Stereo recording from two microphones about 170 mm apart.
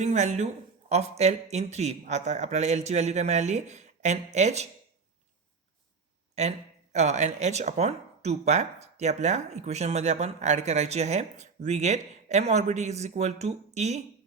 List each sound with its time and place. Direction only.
0.0 s speech: 45° right (ahead or behind)
6.9 s speech: 40° right (ahead or behind)